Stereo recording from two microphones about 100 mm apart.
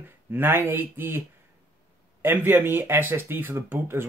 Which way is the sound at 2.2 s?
20° right (ahead or behind).